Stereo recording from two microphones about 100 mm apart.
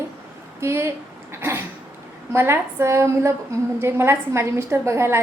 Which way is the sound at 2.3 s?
25° right (ahead or behind).